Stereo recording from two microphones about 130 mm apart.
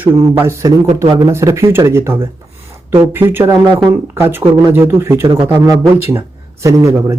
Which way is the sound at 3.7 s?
35° right (ahead or behind).